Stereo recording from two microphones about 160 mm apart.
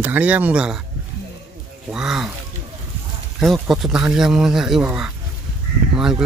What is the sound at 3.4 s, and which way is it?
Speech, centre (ahead or behind).